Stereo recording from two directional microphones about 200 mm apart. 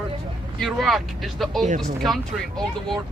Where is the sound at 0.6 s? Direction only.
Centre (ahead or behind).